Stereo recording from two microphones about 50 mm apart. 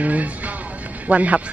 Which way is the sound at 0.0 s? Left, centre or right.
Right.